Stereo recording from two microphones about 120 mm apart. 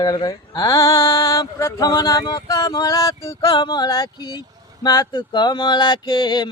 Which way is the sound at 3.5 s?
35° left (ahead or behind).